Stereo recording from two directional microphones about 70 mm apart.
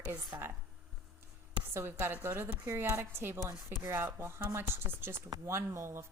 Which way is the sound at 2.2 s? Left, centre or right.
Right.